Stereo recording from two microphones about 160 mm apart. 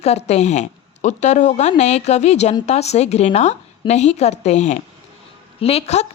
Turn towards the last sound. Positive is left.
turn(degrees=40)  # may be behind; listen again after turning